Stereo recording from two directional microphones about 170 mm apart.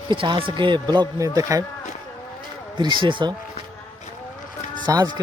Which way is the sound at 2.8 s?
25° right (ahead or behind).